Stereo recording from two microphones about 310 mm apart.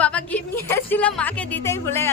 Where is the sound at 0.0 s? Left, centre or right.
Centre.